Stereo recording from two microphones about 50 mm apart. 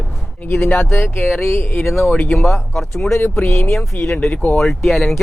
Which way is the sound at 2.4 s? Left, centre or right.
Centre.